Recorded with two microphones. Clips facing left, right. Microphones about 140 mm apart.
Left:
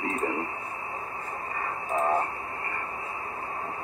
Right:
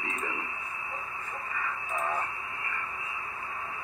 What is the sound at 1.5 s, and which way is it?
Radio, 40° left (ahead or behind).